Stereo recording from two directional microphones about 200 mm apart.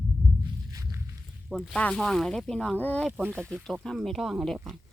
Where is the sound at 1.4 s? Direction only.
Centre (ahead or behind).